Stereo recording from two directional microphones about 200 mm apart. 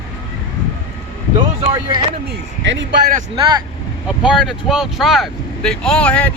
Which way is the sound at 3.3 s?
20° right (ahead or behind).